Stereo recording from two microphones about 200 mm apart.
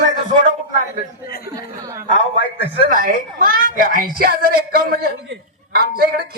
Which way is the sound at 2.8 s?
40° right (ahead or behind).